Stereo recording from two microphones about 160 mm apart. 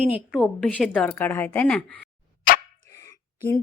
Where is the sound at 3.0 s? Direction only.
15° left (ahead or behind).